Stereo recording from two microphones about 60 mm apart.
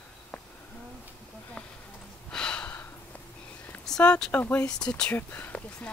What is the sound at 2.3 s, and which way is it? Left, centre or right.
Gasp, centre.